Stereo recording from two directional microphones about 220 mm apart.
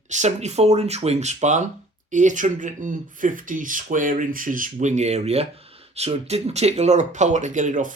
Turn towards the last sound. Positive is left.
turn(degrees=-35)  # may be behind; listen again after turning